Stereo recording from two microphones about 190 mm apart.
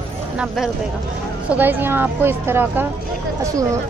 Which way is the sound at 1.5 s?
10° right (ahead or behind).